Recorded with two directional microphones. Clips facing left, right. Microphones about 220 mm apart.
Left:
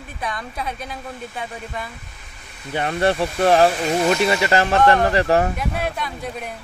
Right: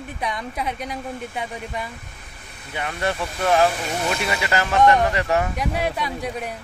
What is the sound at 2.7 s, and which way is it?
Speech, 35° left (ahead or behind).